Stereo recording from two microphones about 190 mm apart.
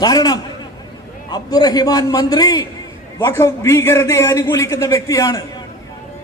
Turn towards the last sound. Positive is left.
turn(degrees=15)  # may be behind; listen again after turning